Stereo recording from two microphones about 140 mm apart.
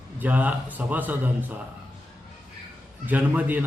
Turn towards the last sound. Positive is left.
turn(degrees=-10)  # may be behind; listen again after turning